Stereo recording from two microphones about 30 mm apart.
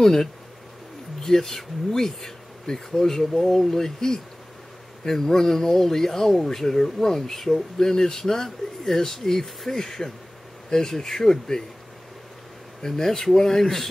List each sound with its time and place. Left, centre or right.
0.0 s speech: centre
12.8 s speech: centre